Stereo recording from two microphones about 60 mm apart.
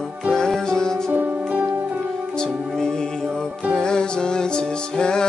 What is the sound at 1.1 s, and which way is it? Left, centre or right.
Music, right.